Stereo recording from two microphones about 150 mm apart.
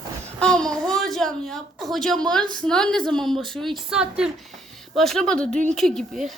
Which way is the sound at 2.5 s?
5° left (ahead or behind).